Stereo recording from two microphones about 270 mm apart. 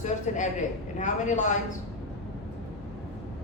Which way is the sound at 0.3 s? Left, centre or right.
Left.